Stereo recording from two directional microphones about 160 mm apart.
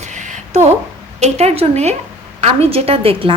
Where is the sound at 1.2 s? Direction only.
45° right (ahead or behind).